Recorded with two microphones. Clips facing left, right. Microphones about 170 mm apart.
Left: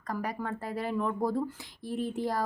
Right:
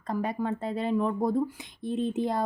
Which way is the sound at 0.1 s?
25° right (ahead or behind).